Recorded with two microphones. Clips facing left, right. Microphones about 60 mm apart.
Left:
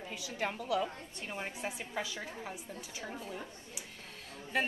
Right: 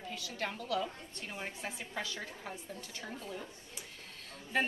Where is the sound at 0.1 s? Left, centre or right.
Centre.